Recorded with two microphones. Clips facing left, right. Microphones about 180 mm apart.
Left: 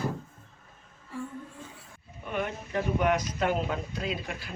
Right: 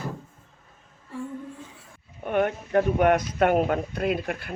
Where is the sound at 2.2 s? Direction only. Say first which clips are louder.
Right 8 dB; 55° right (ahead or behind).